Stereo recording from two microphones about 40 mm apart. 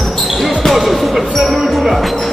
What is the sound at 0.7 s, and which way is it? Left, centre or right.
Basketball bounce, centre.